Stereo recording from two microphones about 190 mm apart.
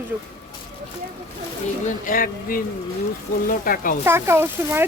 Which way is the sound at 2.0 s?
50° left (ahead or behind).